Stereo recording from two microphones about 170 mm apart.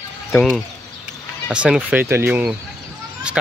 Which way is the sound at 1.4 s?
5° right (ahead or behind).